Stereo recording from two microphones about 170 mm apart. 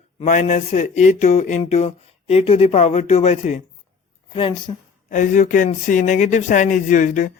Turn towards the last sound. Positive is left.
turn(degrees=50)  # may be behind; listen again after turning